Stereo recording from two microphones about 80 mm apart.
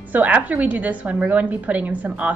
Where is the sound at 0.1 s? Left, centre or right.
Right.